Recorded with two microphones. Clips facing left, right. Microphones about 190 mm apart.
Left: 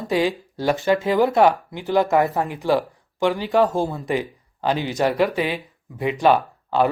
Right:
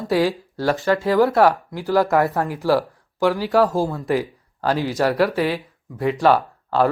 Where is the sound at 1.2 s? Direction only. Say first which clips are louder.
Right 2 dB; centre (ahead or behind).